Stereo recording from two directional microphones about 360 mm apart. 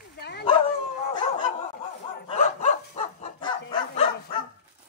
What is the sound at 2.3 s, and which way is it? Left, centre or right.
Bow-wow, centre.